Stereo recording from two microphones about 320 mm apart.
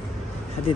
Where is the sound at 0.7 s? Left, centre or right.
Centre.